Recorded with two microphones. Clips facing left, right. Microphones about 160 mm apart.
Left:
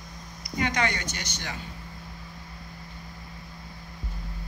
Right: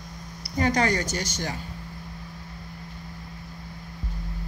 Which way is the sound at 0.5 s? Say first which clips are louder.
Right 4 dB; 40° right (ahead or behind).